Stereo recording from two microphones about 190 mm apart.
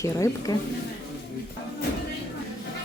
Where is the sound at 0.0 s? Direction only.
15° left (ahead or behind).